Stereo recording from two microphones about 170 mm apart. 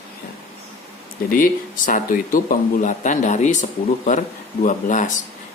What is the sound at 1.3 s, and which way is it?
Speech, 55° left (ahead or behind).